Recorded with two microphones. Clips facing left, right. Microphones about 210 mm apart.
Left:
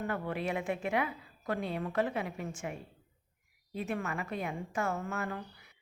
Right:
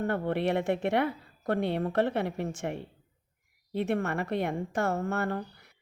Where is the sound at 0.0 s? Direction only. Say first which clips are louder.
Right 6 dB; 60° right (ahead or behind).